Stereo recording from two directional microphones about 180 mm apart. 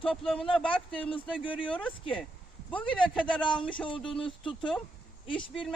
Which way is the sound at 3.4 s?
25° left (ahead or behind).